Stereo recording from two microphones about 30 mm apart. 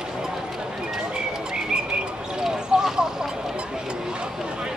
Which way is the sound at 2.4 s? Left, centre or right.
Centre.